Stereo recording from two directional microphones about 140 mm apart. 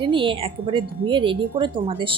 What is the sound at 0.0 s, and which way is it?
Speech, 35° right (ahead or behind).